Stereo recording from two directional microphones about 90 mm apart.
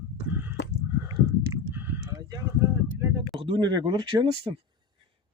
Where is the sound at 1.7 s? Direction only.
25° right (ahead or behind).